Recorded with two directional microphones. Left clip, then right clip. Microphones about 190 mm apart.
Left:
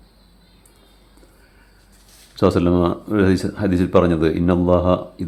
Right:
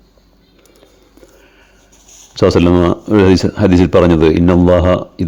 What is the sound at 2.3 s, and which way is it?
Speech, 35° right (ahead or behind).